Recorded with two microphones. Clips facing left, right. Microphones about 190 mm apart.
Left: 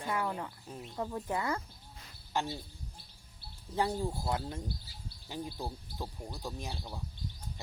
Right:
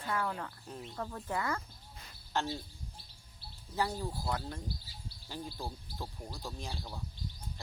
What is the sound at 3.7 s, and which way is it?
Speech, 25° left (ahead or behind).